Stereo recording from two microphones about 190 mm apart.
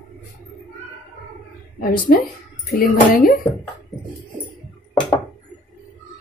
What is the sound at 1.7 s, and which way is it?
A woman's voice, 50° left (ahead or behind).